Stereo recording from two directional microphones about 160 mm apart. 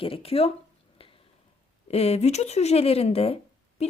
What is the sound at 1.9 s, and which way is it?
Speech, 40° left (ahead or behind).